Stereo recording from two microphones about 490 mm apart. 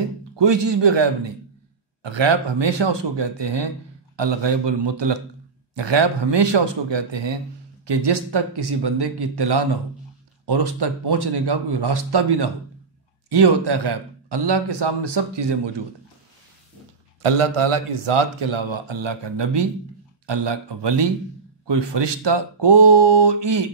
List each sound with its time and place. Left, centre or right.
0.4 s a man's voice: right
17.2 s a man's voice: right